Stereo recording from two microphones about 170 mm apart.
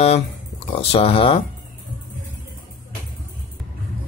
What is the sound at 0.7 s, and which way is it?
Speech, 35° left (ahead or behind).